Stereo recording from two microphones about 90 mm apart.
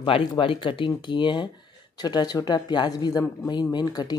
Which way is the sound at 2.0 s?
50° left (ahead or behind).